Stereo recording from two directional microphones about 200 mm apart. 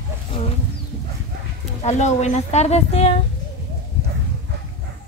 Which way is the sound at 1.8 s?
35° left (ahead or behind).